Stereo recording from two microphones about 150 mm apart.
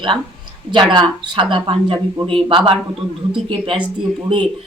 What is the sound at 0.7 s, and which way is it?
Speech, 30° right (ahead or behind).